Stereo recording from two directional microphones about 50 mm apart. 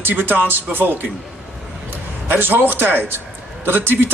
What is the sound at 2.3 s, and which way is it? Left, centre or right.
Speech, right.